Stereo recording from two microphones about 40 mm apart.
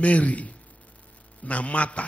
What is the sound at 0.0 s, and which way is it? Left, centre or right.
A man's voice, left.